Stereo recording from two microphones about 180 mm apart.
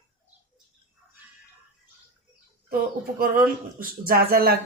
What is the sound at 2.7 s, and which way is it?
Speech, 55° right (ahead or behind).